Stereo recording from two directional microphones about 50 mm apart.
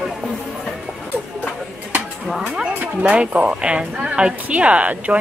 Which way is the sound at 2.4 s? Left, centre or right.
Right.